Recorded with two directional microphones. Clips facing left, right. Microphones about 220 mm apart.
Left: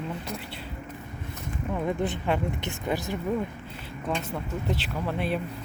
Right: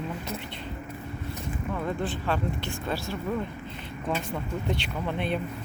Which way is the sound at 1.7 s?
15° left (ahead or behind).